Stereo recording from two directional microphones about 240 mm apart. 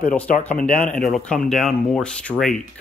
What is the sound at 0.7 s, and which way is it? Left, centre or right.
Speech, centre.